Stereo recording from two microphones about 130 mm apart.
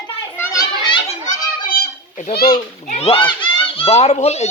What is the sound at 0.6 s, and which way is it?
Children playing, 35° left (ahead or behind).